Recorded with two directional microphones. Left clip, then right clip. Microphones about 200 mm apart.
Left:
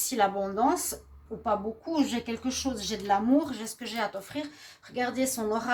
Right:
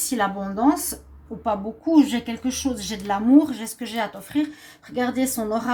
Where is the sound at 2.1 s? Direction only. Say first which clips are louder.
Right 5 dB; 30° left (ahead or behind).